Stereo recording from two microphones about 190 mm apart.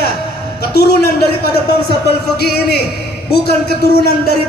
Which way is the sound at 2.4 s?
60° left (ahead or behind).